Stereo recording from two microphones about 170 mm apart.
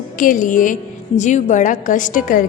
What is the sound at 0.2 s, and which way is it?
A woman's voice, 50° left (ahead or behind).